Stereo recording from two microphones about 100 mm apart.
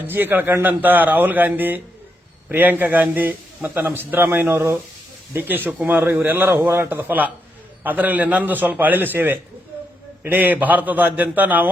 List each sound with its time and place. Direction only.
0.0 s a man's voice: 20° right (ahead or behind)